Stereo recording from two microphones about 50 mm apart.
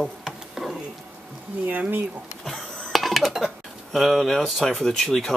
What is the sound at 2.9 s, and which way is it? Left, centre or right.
Dishes, centre.